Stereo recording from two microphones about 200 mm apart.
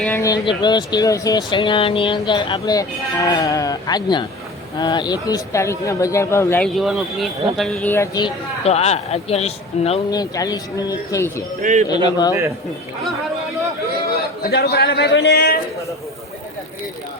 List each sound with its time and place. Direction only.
0.0 s speech: 10° left (ahead or behind)
8.6 s speech: 30° left (ahead or behind)
10.1 s speech: 20° left (ahead or behind)
11.6 s speech: 40° right (ahead or behind)
11.9 s speech: 20° left (ahead or behind)
12.3 s speech: 15° right (ahead or behind)
14.4 s a man's voice: 50° left (ahead or behind)